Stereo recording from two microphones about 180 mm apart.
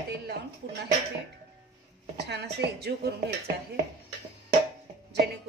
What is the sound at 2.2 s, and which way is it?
Speech, 70° right (ahead or behind).